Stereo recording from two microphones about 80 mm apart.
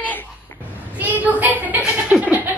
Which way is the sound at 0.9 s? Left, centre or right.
Centre.